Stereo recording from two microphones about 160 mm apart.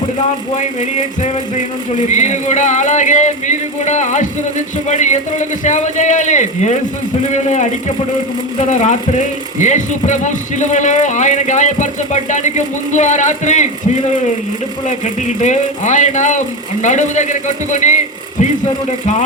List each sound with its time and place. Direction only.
0.5 s speech: 45° left (ahead or behind)